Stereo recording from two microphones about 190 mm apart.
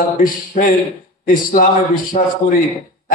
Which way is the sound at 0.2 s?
50° left (ahead or behind).